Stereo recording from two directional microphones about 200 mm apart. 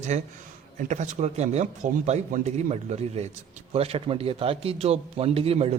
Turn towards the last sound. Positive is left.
turn(degrees=-30)  # may be behind; listen again after turning